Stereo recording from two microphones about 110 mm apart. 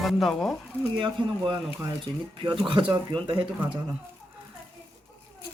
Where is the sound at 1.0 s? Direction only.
50° right (ahead or behind).